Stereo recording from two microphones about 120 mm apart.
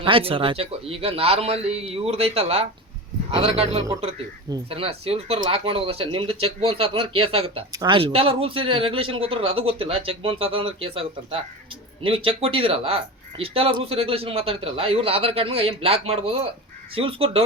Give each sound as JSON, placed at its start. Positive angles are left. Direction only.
{"t": 0.0, "sound": "a man's voice", "side_deg": -50}
{"t": 7.7, "sound": "speech", "side_deg": -30}
{"t": 7.9, "sound": "speech", "side_deg": -50}